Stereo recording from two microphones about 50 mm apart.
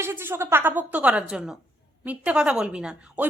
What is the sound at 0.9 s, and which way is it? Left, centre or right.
Speech, right.